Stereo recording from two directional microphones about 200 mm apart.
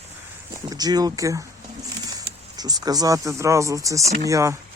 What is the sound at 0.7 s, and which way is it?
Speech, 20° right (ahead or behind).